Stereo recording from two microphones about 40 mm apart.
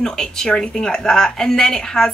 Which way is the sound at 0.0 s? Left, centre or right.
Centre.